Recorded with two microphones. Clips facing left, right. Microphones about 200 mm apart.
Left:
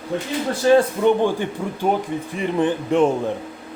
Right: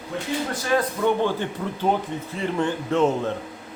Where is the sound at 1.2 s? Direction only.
15° left (ahead or behind).